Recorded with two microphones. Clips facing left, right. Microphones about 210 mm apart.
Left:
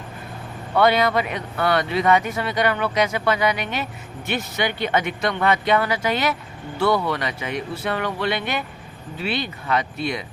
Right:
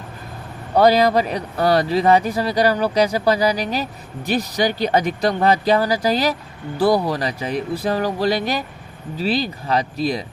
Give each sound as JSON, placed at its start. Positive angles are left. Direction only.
{"t": 0.7, "sound": "speech", "side_deg": -35}